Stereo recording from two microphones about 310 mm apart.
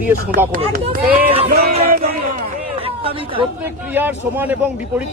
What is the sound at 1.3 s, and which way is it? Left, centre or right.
Music, centre.